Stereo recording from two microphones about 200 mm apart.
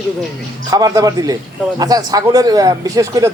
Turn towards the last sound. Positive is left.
turn(degrees=-15)  # may be behind; listen again after turning